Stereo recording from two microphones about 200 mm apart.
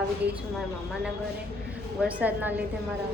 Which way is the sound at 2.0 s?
5° right (ahead or behind).